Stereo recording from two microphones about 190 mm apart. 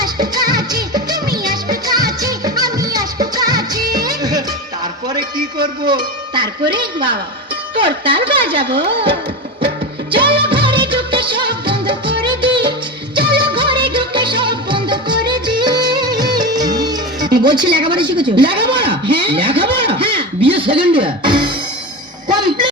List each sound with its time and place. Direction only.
0.0 s music: 20° right (ahead or behind)
0.9 s speech: 20° right (ahead or behind)
1.9 s music: 20° right (ahead or behind)
6.3 s speech: 25° right (ahead or behind)
9.6 s music of bollywood: 25° right (ahead or behind)
13.1 s music: 25° right (ahead or behind)